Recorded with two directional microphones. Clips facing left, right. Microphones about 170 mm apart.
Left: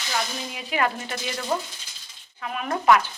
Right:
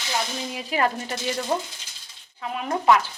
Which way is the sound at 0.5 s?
35° right (ahead or behind).